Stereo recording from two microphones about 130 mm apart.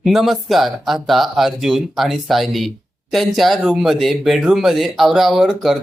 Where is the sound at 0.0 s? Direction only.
Centre (ahead or behind).